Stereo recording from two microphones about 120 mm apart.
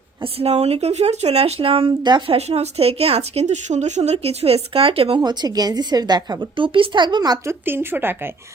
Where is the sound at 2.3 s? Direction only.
65° right (ahead or behind).